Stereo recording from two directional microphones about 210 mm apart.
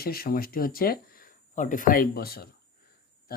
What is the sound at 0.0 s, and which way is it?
Speech, 45° left (ahead or behind).